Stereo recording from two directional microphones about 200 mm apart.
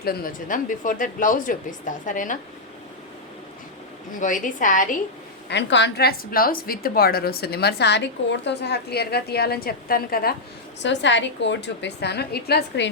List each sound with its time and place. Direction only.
0.0 s speech: 50° left (ahead or behind)
4.1 s speech: 40° left (ahead or behind)
5.5 s a woman's voice: 60° left (ahead or behind)
10.8 s a woman's voice: 65° left (ahead or behind)